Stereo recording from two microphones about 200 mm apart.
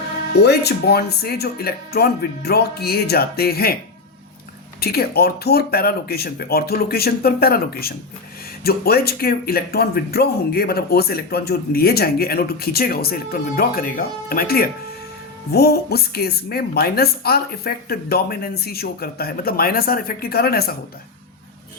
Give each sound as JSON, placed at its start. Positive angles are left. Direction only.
{"t": 0.4, "sound": "speech", "side_deg": 55}
{"t": 4.8, "sound": "speech", "side_deg": 50}